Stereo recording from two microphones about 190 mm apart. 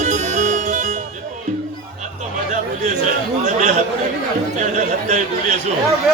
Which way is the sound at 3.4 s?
40° right (ahead or behind).